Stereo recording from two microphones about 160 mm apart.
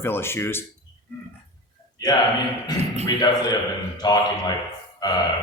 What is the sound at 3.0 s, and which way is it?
Speech, 25° left (ahead or behind).